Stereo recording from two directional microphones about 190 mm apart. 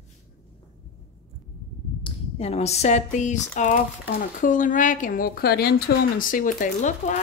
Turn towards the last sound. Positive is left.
turn(degrees=40)  # may be behind; listen again after turning